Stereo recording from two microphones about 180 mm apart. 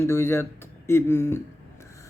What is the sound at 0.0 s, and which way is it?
Speech, 15° left (ahead or behind).